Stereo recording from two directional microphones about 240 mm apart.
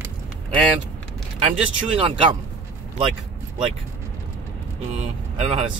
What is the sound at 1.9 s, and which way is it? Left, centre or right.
Speech, right.